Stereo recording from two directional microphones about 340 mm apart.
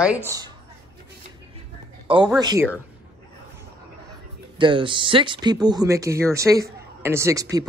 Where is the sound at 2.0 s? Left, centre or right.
Centre.